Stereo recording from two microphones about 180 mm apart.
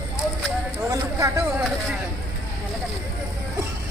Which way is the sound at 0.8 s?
15° right (ahead or behind).